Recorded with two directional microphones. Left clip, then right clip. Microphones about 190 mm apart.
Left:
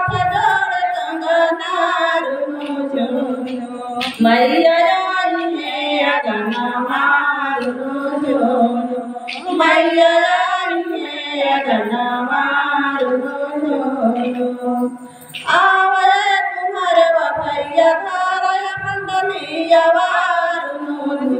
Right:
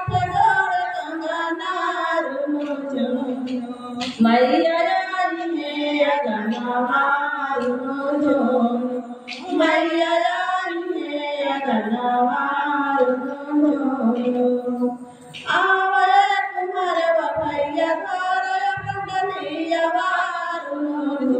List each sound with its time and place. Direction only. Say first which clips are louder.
0.1 s music: right 3 dB; 15° right (ahead or behind)
2.0 s female singing: left 5 dB; 15° right (ahead or behind)
4.2 s child singing: left 4 dB; 20° right (ahead or behind)
5.9 s music: left 3 dB; 15° right (ahead or behind)
9.6 s child singing: left 7 dB; 15° right (ahead or behind)
11.3 s chant: left 8 dB; 15° right (ahead or behind)
15.5 s female singing: left 5 dB; 15° right (ahead or behind)
16.8 s child singing: left 7 dB; 15° right (ahead or behind)
19.7 s music: left 8 dB; 15° right (ahead or behind)